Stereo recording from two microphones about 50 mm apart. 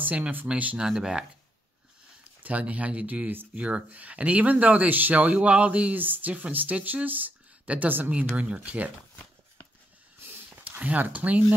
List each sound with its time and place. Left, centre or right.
0.0 s speech: right
0.7 s speech: centre
2.4 s speech: right
6.0 s speech: right
10.6 s speech: right